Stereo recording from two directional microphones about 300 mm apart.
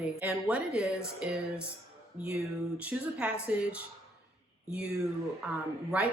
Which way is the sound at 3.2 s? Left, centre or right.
Centre.